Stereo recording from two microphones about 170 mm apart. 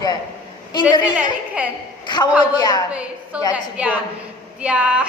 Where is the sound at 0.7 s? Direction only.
25° left (ahead or behind).